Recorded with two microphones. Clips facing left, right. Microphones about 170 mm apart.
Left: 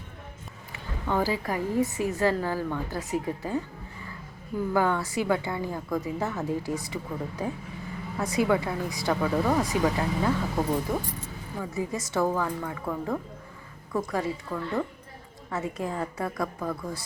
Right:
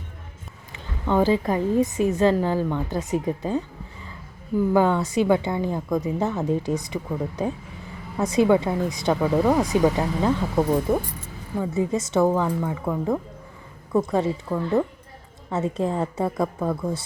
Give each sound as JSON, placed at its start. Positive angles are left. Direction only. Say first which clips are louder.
{"t": 0.7, "sound": "a woman's voice", "louder": "right 5 dB", "side_deg": -20}
{"t": 4.7, "sound": "a woman's voice", "louder": "right 4 dB", "side_deg": -20}
{"t": 11.6, "sound": "a woman's voice", "louder": "right 7 dB", "side_deg": -25}